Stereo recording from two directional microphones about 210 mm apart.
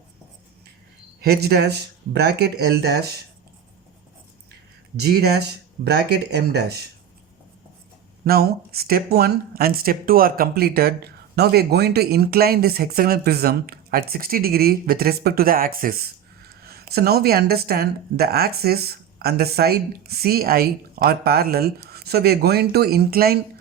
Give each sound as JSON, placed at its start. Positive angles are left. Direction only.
{"t": 1.2, "sound": "speech", "side_deg": -50}
{"t": 4.9, "sound": "speech", "side_deg": -50}
{"t": 8.2, "sound": "speech", "side_deg": -50}